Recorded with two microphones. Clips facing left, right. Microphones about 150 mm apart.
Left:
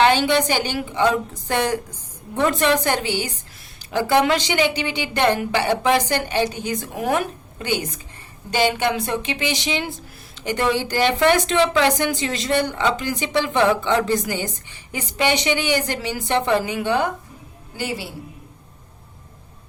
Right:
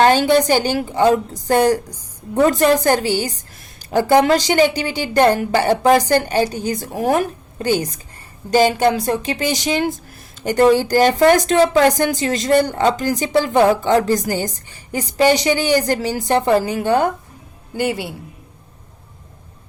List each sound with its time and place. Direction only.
0.0 s speech: 40° right (ahead or behind)
17.7 s a man's voice: 60° right (ahead or behind)